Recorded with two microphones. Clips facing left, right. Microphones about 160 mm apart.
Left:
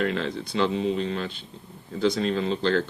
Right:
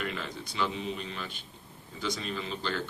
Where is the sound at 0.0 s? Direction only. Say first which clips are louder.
Left 10 dB; 60° left (ahead or behind).